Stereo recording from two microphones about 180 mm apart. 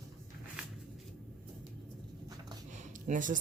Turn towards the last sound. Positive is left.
turn(degrees=-45)  # may be behind; listen again after turning